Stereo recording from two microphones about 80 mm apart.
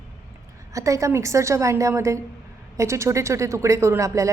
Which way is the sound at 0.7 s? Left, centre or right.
Right.